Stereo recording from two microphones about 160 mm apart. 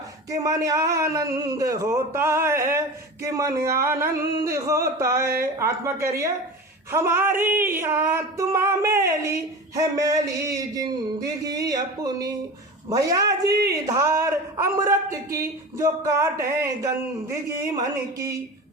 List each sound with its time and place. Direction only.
0.3 s speech: 20° right (ahead or behind)
5.4 s a sound: 15° right (ahead or behind)
9.7 s speech: 20° right (ahead or behind)